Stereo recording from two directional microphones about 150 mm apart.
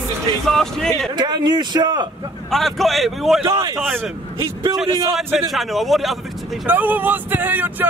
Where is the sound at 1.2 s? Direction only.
30° right (ahead or behind).